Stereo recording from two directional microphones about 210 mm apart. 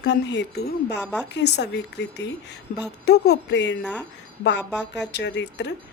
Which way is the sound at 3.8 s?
5° left (ahead or behind).